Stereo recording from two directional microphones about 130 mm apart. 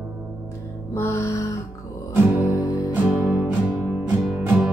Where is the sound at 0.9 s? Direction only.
20° left (ahead or behind).